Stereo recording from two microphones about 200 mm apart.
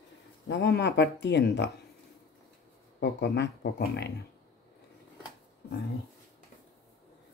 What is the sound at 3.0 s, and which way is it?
Speech, 60° left (ahead or behind).